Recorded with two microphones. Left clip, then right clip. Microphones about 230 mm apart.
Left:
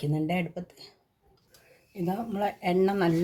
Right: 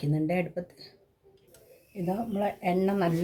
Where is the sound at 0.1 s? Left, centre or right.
Left.